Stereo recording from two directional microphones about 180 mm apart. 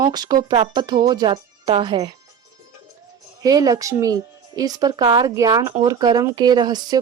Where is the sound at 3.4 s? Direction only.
20° right (ahead or behind).